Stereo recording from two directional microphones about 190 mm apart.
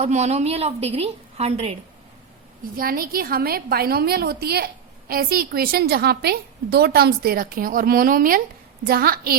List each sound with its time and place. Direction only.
0.0 s a woman's voice: 35° right (ahead or behind)
2.7 s a woman's voice: 50° right (ahead or behind)